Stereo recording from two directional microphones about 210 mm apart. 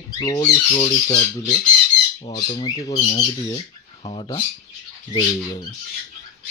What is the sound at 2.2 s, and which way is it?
Speech, 20° left (ahead or behind).